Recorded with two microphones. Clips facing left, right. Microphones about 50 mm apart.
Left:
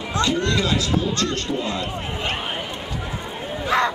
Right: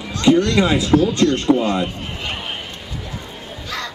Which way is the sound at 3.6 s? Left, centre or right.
Left.